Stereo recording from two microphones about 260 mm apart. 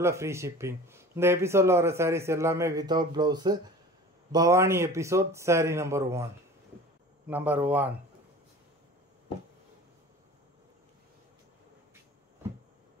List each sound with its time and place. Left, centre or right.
0.0 s speech: centre
7.2 s speech: centre